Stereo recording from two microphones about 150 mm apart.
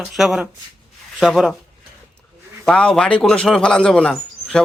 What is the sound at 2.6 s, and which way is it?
Speech, 5° left (ahead or behind).